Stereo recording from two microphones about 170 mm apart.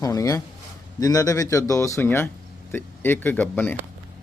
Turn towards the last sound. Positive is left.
turn(degrees=10)  # may be behind; listen again after turning